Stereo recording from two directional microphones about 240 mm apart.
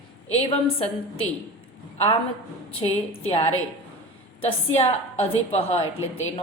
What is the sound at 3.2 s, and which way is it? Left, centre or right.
A woman's voice, left.